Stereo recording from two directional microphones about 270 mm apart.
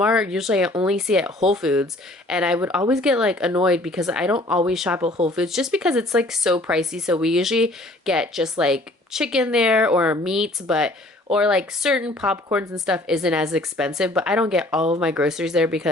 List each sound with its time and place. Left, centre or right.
0.0 s speech: centre
5.0 s speech: right
5.3 s speech: centre